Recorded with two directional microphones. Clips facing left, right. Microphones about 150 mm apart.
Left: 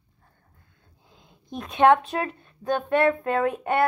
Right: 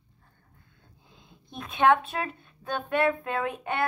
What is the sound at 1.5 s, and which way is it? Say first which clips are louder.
A woman's voice: left 4 dB; 40° left (ahead or behind).